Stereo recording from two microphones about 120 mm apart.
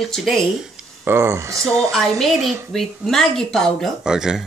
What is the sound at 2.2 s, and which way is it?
Speech, centre (ahead or behind).